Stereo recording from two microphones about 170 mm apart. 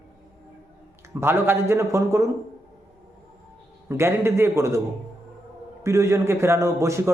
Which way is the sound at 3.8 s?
15° right (ahead or behind).